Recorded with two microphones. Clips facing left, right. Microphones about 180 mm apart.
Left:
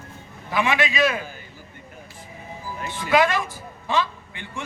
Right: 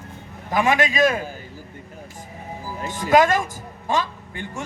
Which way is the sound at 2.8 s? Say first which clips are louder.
Right 3 dB; 45° right (ahead or behind).